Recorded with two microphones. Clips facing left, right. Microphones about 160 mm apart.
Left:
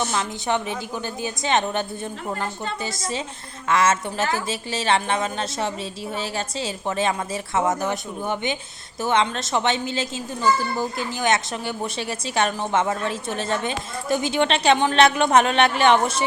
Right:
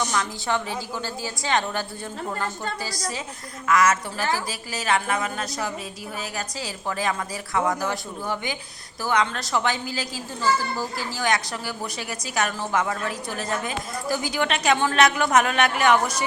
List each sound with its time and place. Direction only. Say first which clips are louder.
0.1 s a woman's voice: left 2 dB; 15° left (ahead or behind)